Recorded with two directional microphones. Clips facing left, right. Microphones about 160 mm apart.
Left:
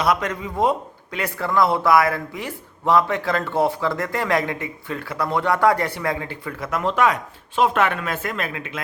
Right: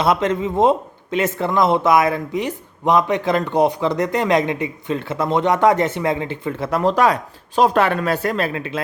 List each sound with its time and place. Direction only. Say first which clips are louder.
0.0 s speech: right 4 dB; 25° right (ahead or behind)